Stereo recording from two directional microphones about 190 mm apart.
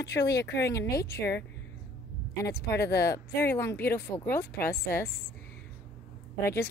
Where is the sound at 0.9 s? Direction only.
15° left (ahead or behind).